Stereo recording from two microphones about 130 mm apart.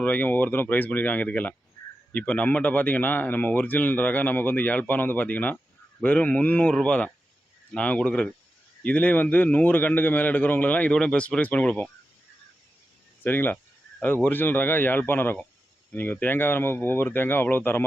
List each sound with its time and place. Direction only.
0.0 s speech: 15° left (ahead or behind)
13.2 s speech: 15° left (ahead or behind)